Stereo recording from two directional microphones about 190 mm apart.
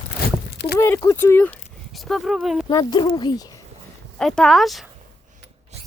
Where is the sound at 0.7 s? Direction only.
15° left (ahead or behind); by 2.6 s centre (ahead or behind).